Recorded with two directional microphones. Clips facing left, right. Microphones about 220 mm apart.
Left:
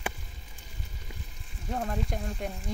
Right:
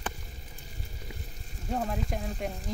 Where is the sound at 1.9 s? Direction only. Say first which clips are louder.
Even; 5° right (ahead or behind).